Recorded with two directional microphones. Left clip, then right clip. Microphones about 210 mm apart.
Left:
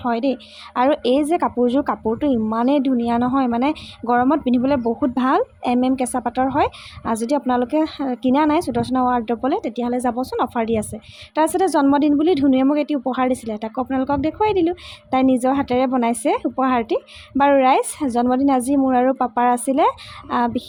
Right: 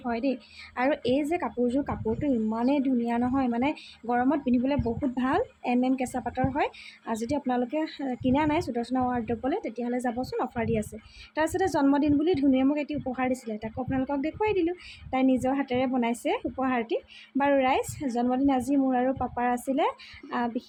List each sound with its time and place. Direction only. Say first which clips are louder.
0.0 s speech: left 9 dB; 30° left (ahead or behind)